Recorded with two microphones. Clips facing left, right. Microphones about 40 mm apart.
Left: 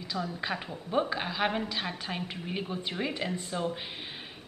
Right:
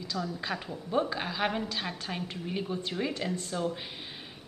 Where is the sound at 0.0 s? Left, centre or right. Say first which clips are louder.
Left 1 dB; centre.